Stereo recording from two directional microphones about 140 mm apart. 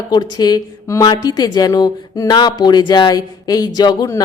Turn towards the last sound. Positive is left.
turn(degrees=30)  # may be behind; listen again after turning